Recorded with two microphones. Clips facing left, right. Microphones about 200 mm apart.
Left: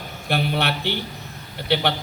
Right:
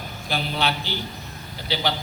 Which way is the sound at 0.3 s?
60° left (ahead or behind).